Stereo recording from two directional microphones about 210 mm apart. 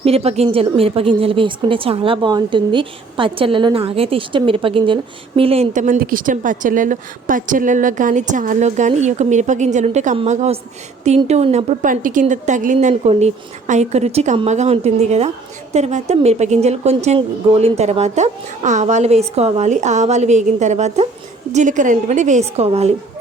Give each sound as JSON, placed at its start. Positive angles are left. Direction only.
{"t": 0.0, "sound": "a woman's voice", "side_deg": -30}